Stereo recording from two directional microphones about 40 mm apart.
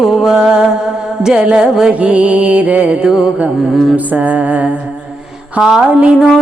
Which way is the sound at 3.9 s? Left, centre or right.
Right.